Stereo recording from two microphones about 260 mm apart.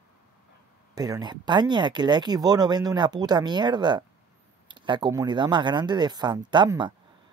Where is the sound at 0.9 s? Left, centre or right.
Centre.